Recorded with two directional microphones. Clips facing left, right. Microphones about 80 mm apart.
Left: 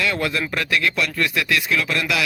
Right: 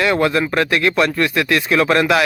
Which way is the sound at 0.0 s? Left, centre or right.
Right.